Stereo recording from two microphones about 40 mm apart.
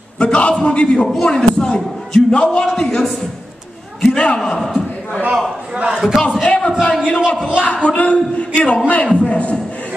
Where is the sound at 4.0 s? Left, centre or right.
Centre.